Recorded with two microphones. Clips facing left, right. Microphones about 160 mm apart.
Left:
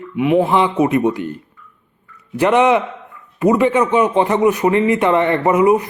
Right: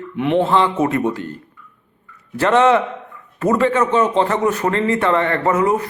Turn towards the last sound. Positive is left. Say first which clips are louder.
# left 4 dB
turn(degrees=15)  # may be behind; listen again after turning